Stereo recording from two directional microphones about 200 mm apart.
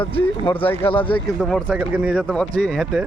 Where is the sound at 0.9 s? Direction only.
25° left (ahead or behind).